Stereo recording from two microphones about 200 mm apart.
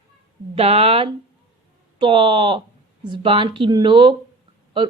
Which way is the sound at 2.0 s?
25° right (ahead or behind).